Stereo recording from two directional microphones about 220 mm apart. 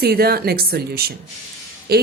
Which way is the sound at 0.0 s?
45° right (ahead or behind).